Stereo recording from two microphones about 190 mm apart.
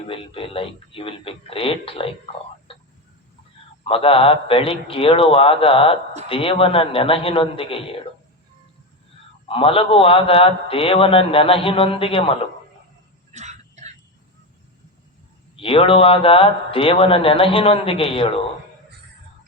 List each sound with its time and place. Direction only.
0.1 s a man's voice: 30° left (ahead or behind)
3.8 s a man's voice: 30° left (ahead or behind)
9.5 s a man's voice: 30° left (ahead or behind)
13.3 s throat clearing: 35° right (ahead or behind)
15.5 s a man's voice: 30° left (ahead or behind)